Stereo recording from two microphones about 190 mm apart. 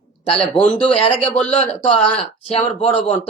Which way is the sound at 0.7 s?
30° left (ahead or behind).